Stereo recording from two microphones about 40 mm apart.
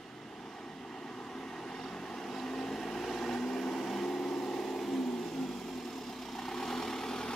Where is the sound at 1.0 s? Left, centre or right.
Centre.